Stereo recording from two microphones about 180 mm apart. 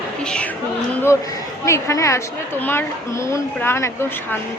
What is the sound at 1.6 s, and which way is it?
A woman's voice, 15° left (ahead or behind).